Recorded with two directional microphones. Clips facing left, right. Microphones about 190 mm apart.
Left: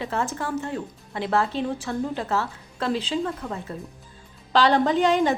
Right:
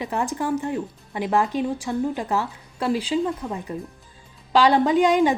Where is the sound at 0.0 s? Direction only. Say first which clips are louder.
Right 2 dB; 15° right (ahead or behind).